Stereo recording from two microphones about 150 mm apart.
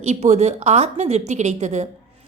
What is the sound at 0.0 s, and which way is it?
A woman's voice, 45° right (ahead or behind).